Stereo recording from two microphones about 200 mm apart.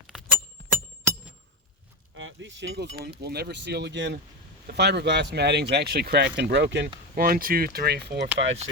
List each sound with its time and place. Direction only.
0.1 s glass: centre (ahead or behind)
2.1 s speech: 70° right (ahead or behind)
7.2 s speech: 45° right (ahead or behind)